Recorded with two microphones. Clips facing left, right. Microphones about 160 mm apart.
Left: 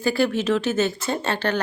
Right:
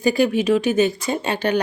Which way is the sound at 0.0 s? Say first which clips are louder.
Right 3 dB; 15° right (ahead or behind).